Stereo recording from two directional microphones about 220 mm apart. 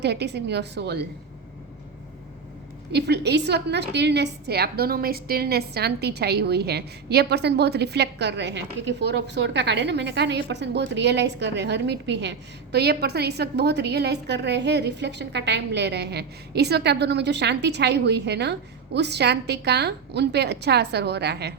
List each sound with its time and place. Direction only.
0.0 s a woman's voice: 50° right (ahead or behind)
2.9 s a woman's voice: 50° right (ahead or behind)